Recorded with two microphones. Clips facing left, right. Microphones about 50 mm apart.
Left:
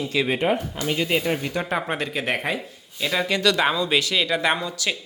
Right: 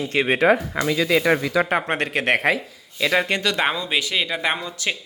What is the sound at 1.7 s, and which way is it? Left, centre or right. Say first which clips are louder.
A man's voice: right 3 dB; right.